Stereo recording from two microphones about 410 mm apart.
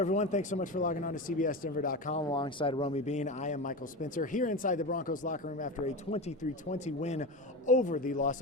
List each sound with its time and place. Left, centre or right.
0.0 s speech: centre